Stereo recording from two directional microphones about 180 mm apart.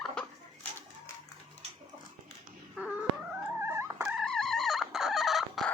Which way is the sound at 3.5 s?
15° right (ahead or behind).